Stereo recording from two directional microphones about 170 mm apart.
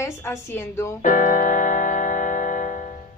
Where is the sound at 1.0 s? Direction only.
55° left (ahead or behind).